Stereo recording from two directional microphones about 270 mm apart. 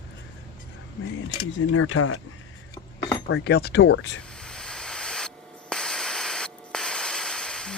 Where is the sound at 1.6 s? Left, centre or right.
Left.